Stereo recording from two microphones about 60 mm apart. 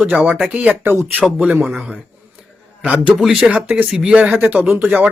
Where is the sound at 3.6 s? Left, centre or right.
Right.